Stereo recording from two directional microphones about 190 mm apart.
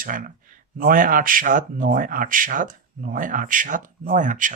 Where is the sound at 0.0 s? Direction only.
45° right (ahead or behind).